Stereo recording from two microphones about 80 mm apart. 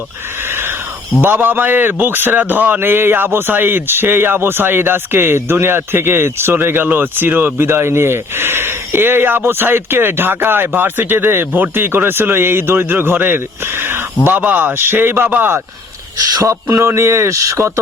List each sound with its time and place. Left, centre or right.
0.4 s a sound: right
1.2 s a man's voice: right
16.4 s a man's voice: right